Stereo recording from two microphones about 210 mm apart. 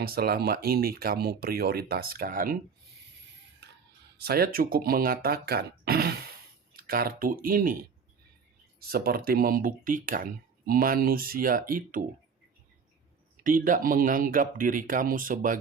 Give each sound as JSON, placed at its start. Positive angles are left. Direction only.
{"t": 0.0, "sound": "speech", "side_deg": -45}
{"t": 3.6, "sound": "whispering", "side_deg": -55}
{"t": 4.2, "sound": "speech", "side_deg": -45}
{"t": 8.8, "sound": "speech", "side_deg": -45}
{"t": 13.4, "sound": "speech", "side_deg": -40}